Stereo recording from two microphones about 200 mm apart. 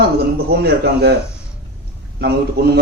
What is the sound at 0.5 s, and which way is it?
Speech, 55° right (ahead or behind).